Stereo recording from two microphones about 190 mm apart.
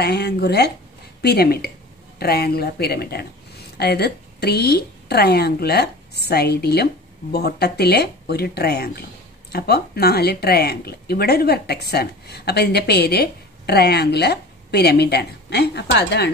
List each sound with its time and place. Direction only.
0.0 s a woman's voice: 60° left (ahead or behind)